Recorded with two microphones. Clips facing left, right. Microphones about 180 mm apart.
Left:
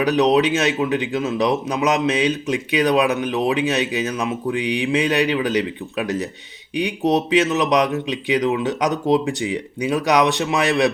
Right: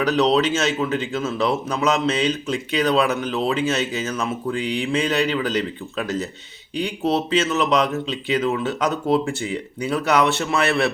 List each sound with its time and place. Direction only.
0.0 s speech: 15° left (ahead or behind)